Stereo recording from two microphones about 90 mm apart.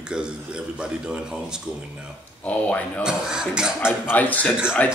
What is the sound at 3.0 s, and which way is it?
Speech, 10° right (ahead or behind).